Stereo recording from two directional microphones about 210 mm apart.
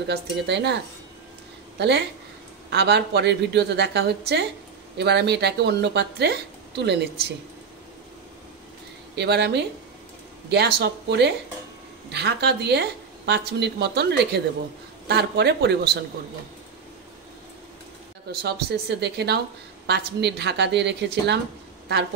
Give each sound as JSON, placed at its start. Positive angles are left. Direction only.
{"t": 0.0, "sound": "speech", "side_deg": -55}
{"t": 9.1, "sound": "speech", "side_deg": -55}
{"t": 18.3, "sound": "speech", "side_deg": -50}